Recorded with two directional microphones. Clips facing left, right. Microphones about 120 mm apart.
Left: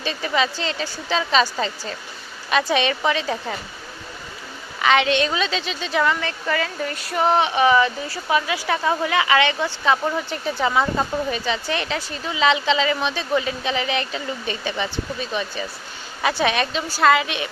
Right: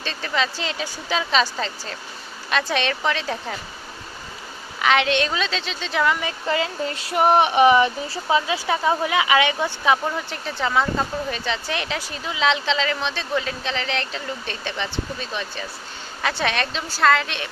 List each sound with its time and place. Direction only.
0.0 s speech: 10° left (ahead or behind)
4.8 s speech: centre (ahead or behind)
6.4 s speech: 20° right (ahead or behind)
10.2 s speech: 5° left (ahead or behind)